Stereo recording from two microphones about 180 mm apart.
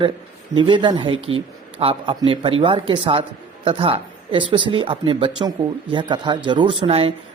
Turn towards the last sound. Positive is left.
turn(degrees=-30)  # may be behind; listen again after turning